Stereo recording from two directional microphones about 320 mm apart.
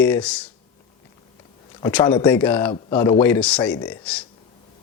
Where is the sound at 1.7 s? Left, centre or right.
Centre.